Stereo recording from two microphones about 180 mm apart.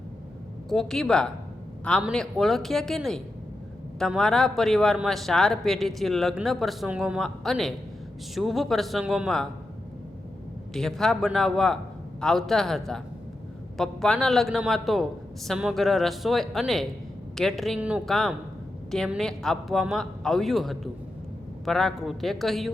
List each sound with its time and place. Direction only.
0.7 s a man's voice: centre (ahead or behind)
10.8 s a man's voice: centre (ahead or behind)